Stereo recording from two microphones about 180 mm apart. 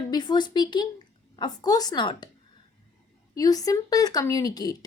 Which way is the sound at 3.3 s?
20° left (ahead or behind).